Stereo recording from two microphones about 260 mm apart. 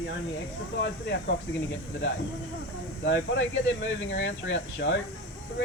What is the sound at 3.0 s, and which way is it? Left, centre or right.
Speech, left.